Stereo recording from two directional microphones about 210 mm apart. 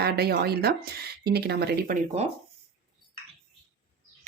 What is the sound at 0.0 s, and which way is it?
Speech, 50° right (ahead or behind).